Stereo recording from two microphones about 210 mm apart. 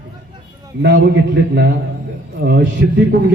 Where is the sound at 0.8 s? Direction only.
55° right (ahead or behind).